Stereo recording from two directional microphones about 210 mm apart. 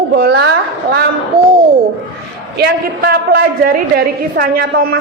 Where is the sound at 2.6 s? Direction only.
50° right (ahead or behind).